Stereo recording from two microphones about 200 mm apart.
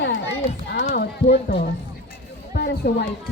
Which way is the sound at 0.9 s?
45° left (ahead or behind).